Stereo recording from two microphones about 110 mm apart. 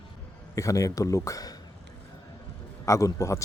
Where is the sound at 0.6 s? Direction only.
30° left (ahead or behind).